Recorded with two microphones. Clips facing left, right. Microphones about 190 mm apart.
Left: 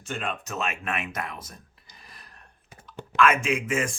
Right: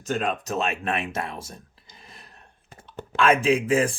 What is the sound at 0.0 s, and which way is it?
Speech, 40° right (ahead or behind).